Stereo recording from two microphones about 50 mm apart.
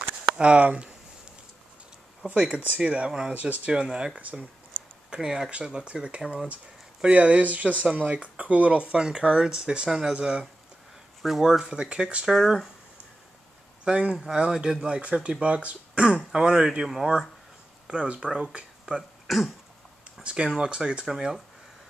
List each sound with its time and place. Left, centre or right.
0.4 s speech: right
2.2 s speech: right
3.3 s speech: right
3.7 s speech: centre
4.2 s speech: right
5.1 s speech: centre
12.3 s speech: centre
13.8 s speech: right
15.4 s speech: right
16.8 s speech: centre
17.8 s speech: centre
19.2 s throat clearing: centre
20.4 s speech: centre